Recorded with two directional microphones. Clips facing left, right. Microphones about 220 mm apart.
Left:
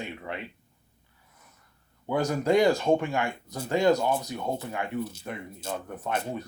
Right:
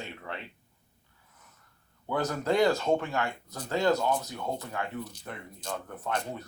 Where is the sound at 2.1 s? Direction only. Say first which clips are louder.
Left 4 dB; 15° left (ahead or behind).